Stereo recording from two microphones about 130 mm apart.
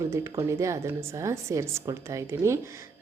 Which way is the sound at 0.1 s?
25° right (ahead or behind).